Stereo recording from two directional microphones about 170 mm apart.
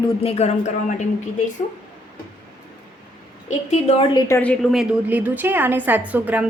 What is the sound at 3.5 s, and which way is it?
Speech, 40° left (ahead or behind).